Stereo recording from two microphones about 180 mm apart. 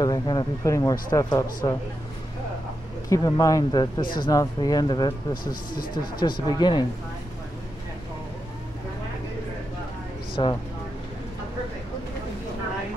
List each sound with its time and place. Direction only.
0.0 s speech: 25° left (ahead or behind)
3.1 s speech: 20° left (ahead or behind)
5.4 s speech: 50° left (ahead or behind)
6.1 s speech: 25° left (ahead or behind)
10.4 s speech: 25° left (ahead or behind)